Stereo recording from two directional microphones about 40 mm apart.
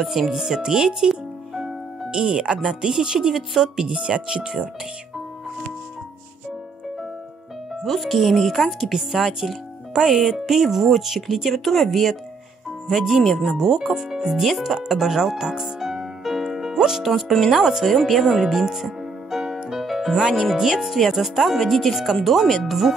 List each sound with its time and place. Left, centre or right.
0.0 s speech: centre
0.3 s speech: centre
7.8 s speech: centre
9.1 s speech: centre
14.8 s music: centre
17.3 s speech: centre
17.6 s speech: centre
19.4 s music: centre
20.5 s speech: centre